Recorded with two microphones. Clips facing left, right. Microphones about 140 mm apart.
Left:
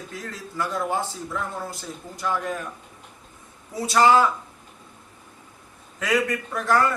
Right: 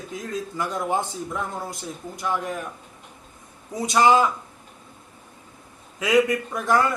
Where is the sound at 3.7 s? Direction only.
20° right (ahead or behind).